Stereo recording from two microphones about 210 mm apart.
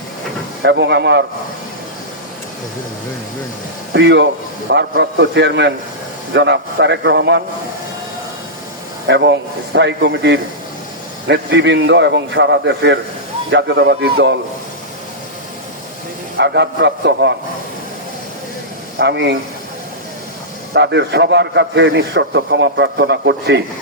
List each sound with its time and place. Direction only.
0.6 s a man's voice: 55° right (ahead or behind)
3.9 s a man's voice: 55° right (ahead or behind)
9.0 s a man's voice: 55° right (ahead or behind)
16.4 s a man's voice: 55° right (ahead or behind)
18.9 s a man's voice: 55° right (ahead or behind)
20.7 s a man's voice: 55° right (ahead or behind)